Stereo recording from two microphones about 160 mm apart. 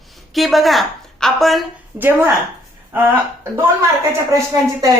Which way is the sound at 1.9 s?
10° right (ahead or behind).